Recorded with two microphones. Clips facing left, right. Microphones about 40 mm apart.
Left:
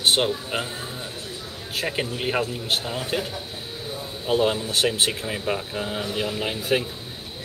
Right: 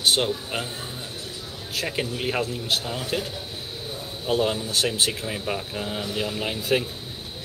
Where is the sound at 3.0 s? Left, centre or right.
Left.